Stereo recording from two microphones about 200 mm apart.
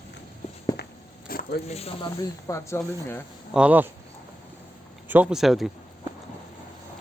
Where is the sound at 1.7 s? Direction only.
30° left (ahead or behind).